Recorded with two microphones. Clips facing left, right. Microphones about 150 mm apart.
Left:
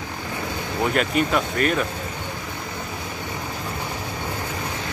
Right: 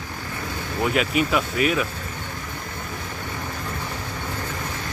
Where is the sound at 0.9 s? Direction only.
5° right (ahead or behind).